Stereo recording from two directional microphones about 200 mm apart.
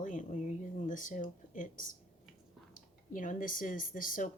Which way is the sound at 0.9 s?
40° left (ahead or behind).